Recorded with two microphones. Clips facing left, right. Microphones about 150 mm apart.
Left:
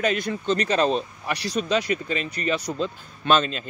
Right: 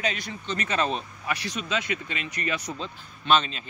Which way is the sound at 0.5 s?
35° left (ahead or behind).